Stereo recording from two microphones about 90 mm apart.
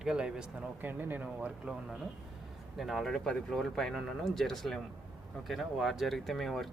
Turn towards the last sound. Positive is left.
turn(degrees=0)  # may be behind; listen again after turning